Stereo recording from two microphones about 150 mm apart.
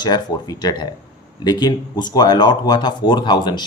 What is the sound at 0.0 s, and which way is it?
Speech, 30° left (ahead or behind).